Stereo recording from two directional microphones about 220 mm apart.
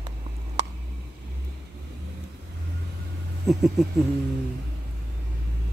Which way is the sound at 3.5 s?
Centre (ahead or behind).